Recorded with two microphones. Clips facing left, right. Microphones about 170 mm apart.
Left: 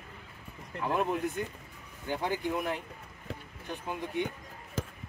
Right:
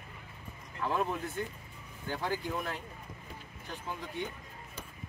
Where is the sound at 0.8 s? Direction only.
15° left (ahead or behind).